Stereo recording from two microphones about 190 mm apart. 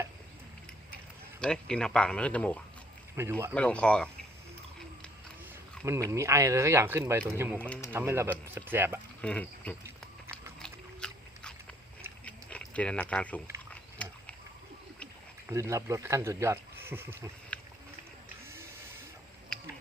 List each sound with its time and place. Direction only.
1.4 s speech: 5° left (ahead or behind)
3.2 s speech: 15° right (ahead or behind)
3.5 s speech: 5° left (ahead or behind)
5.8 s speech: 15° right (ahead or behind)
7.7 s speech: 10° left (ahead or behind)
7.9 s speech: 15° right (ahead or behind)
9.2 s speech: 5° left (ahead or behind)
10.6 s a sound: 5° left (ahead or behind)
15.4 s speech: 15° right (ahead or behind)
17.5 s a sound: 5° left (ahead or behind)